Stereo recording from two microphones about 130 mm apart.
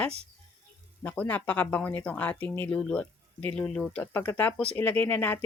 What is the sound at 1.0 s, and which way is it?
Speech, 10° left (ahead or behind).